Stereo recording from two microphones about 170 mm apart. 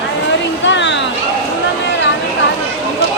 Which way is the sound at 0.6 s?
90° left.